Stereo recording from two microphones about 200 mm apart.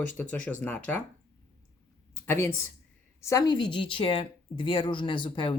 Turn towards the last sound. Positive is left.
turn(degrees=25)  # may be behind; listen again after turning